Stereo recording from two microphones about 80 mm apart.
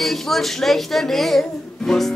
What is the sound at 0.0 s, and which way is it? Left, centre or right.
Speech, centre.